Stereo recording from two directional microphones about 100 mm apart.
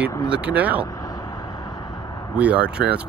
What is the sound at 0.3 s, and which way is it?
Speech, 15° right (ahead or behind).